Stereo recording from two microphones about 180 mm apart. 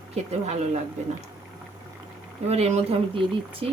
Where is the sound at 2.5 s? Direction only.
35° right (ahead or behind).